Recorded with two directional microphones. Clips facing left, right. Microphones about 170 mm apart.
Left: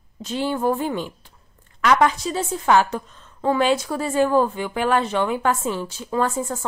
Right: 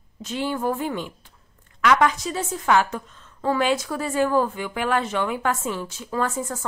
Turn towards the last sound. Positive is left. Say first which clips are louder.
# left 3 dB
turn(degrees=30)  # may be behind; listen again after turning